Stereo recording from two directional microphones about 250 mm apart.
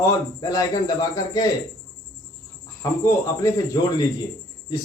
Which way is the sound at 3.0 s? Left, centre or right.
Centre.